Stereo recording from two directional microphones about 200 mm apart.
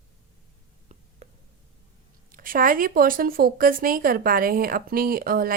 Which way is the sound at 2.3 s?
45° right (ahead or behind).